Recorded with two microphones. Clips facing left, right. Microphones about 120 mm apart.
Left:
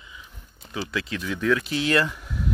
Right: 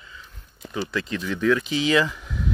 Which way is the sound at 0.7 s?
Centre (ahead or behind).